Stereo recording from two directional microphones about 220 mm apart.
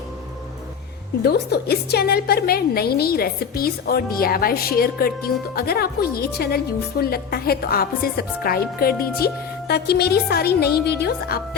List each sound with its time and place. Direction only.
1.2 s a woman's voice: 45° left (ahead or behind)